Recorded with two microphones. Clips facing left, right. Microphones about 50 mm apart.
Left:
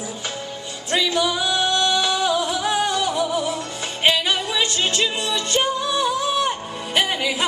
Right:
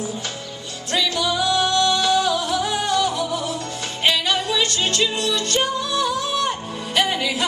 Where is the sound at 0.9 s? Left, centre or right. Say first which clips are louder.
Left 1 dB; centre.